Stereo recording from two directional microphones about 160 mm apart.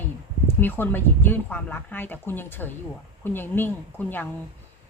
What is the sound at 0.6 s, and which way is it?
Speech, 10° left (ahead or behind).